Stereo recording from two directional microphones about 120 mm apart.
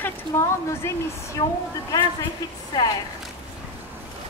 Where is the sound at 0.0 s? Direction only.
25° left (ahead or behind).